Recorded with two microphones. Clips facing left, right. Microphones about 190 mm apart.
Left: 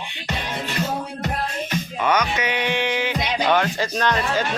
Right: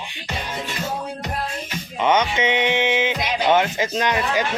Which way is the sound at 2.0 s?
25° right (ahead or behind).